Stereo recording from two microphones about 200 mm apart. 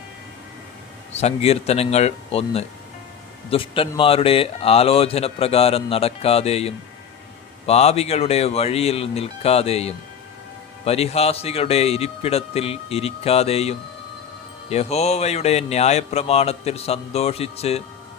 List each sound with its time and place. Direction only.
1.1 s speech: 30° left (ahead or behind)